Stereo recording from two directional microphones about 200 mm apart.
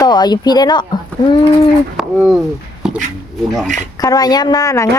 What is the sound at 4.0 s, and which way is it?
Speech, 20° left (ahead or behind).